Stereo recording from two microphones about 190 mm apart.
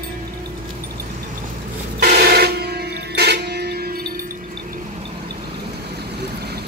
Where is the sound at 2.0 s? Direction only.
60° right (ahead or behind).